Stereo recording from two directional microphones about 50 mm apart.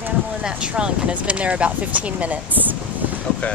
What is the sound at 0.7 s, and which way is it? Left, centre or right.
Speech, right.